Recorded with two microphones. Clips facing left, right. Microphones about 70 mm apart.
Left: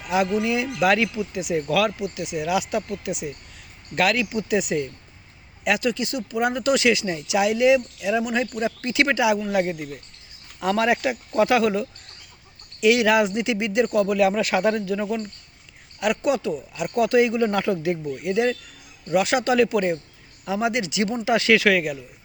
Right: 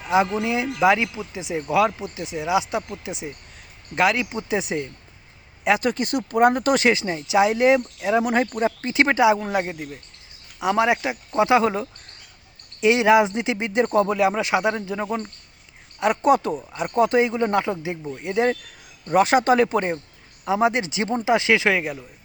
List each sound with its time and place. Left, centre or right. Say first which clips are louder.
0.0 s speech: right 1 dB; right
5.9 s speech: right 3 dB; right
9.6 s speech: left 3 dB; centre